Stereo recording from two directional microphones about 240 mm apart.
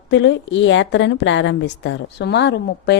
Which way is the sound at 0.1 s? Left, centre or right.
Left.